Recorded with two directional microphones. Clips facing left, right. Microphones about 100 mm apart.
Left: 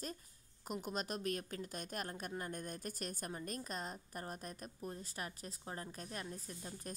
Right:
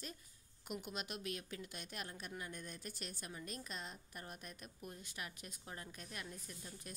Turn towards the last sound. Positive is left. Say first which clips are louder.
# left 5 dB
turn(degrees=35)  # may be behind; listen again after turning